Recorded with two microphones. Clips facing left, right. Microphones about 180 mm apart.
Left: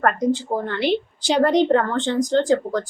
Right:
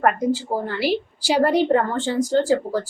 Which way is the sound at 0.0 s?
5° right (ahead or behind).